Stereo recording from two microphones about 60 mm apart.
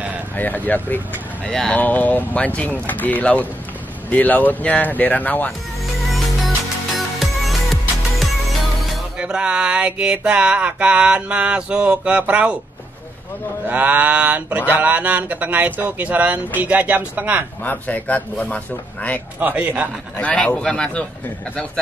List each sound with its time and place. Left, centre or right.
0.4 s speech: left
1.4 s speech: centre
1.8 s speech: left
7.2 s music: centre
9.2 s a sound: centre
13.7 s a sound: right
17.6 s speech: left
19.4 s a sound: right
20.2 s speech: left